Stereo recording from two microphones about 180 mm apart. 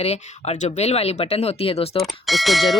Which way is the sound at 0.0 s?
35° left (ahead or behind).